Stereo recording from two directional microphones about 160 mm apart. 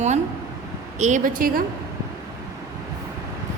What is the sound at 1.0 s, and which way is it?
Speech, 50° right (ahead or behind).